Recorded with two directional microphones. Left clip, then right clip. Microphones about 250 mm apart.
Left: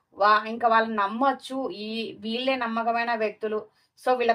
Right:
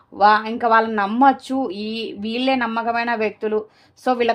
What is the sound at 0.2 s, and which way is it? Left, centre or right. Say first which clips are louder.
Speech: right 5 dB; right.